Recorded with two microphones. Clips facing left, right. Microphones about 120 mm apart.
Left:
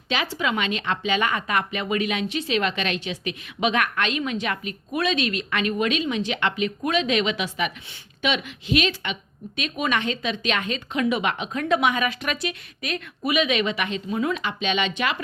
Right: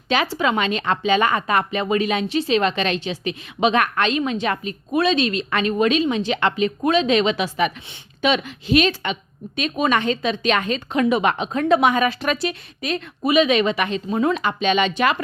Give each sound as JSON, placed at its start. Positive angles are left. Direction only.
{"t": 0.1, "sound": "speech", "side_deg": -40}